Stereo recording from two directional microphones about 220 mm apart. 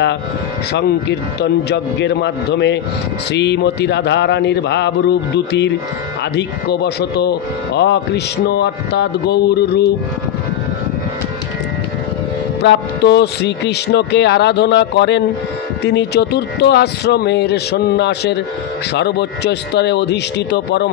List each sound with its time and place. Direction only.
0.7 s a man's voice: 50° left (ahead or behind)
12.6 s a man's voice: 50° left (ahead or behind)